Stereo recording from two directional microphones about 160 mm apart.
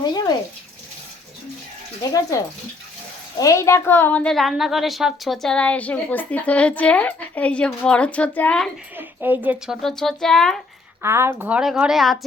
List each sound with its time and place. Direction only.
0.0 s bathtub: 25° left (ahead or behind)
3.3 s a woman's voice: 20° left (ahead or behind)
9.0 s speech: 10° right (ahead or behind)
9.8 s speech: centre (ahead or behind)
11.0 s a woman's voice: 15° right (ahead or behind); by 12.2 s centre (ahead or behind)